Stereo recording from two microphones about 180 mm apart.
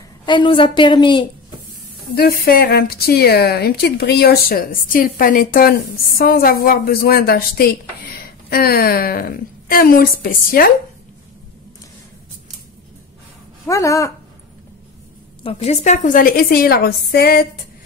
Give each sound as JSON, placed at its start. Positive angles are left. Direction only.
{"t": 0.2, "sound": "a woman's voice", "side_deg": 25}
{"t": 2.1, "sound": "speech", "side_deg": 55}
{"t": 13.7, "sound": "speech", "side_deg": 15}
{"t": 15.4, "sound": "a woman's voice", "side_deg": 35}